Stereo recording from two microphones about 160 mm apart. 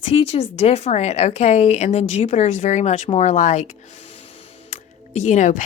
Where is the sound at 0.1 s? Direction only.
40° left (ahead or behind).